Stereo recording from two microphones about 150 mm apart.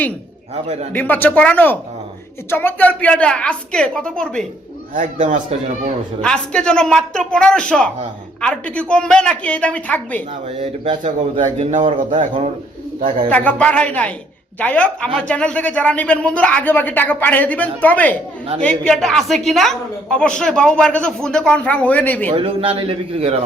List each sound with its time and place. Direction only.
0.9 s speech: 10° left (ahead or behind)
4.9 s a man's voice: 55° right (ahead or behind)
6.2 s a woman's voice: 5° left (ahead or behind)
11.0 s a man's voice: 55° right (ahead or behind)
13.3 s a woman's voice: 10° left (ahead or behind)
22.3 s a man's voice: 40° right (ahead or behind)